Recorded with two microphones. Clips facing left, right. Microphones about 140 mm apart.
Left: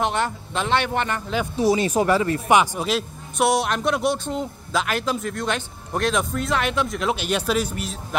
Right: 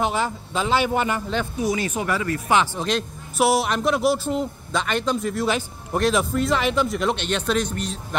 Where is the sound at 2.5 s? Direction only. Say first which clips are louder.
Left 2 dB; 15° left (ahead or behind).